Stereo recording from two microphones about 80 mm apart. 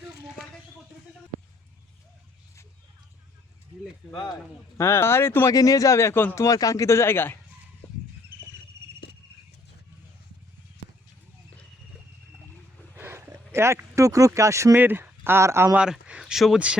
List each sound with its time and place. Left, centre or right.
4.1 s speech: left
4.8 s speech: left
5.5 s a man's voice: left
13.0 s a sound: right
14.8 s speech: right
15.7 s speech: centre